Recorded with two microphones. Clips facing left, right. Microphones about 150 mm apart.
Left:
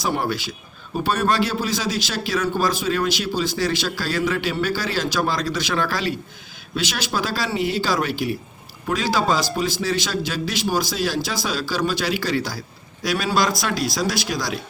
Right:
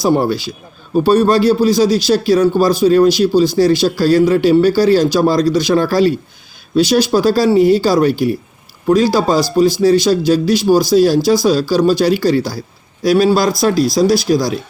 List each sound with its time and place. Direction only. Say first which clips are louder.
0.0 s speech: right 10 dB; 35° right (ahead or behind)